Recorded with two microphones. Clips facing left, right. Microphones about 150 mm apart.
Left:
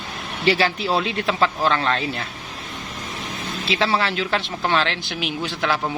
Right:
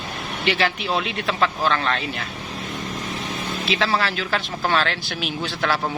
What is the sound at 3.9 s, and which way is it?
Speech, 25° left (ahead or behind).